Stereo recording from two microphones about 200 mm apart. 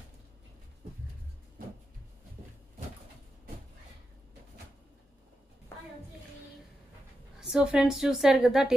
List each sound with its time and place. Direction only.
7.3 s a woman's voice: 5° right (ahead or behind)